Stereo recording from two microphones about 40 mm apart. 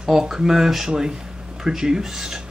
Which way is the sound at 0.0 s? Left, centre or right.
Centre.